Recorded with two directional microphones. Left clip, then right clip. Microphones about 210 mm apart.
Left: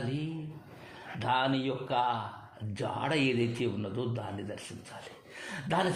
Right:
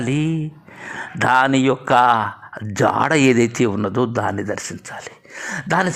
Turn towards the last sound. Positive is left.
turn(degrees=-35)  # may be behind; listen again after turning